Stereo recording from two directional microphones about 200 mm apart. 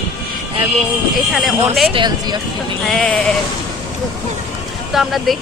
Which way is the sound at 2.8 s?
5° left (ahead or behind).